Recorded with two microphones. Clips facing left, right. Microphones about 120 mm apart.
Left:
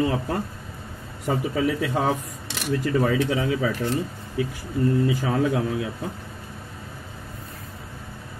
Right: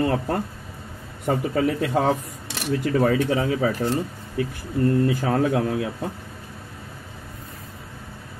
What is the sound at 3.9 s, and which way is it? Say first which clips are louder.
Speech: right 1 dB; 50° right (ahead or behind).